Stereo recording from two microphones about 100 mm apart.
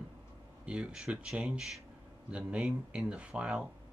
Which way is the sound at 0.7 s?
10° right (ahead or behind).